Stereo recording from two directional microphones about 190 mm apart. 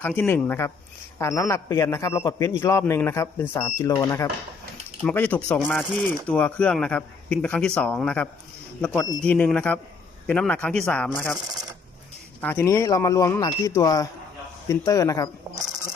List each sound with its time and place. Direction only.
0.0 s a man's voice: 10° left (ahead or behind)
12.4 s a man's voice: 10° left (ahead or behind)